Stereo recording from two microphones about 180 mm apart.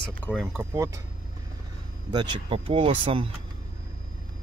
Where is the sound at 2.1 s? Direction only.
30° right (ahead or behind).